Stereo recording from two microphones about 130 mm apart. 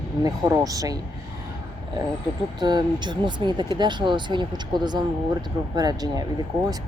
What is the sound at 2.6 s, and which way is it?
Speech, 35° right (ahead or behind).